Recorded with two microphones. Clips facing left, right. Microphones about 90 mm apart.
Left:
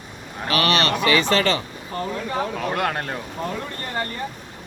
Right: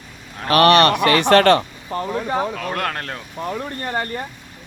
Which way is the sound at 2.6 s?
10° left (ahead or behind).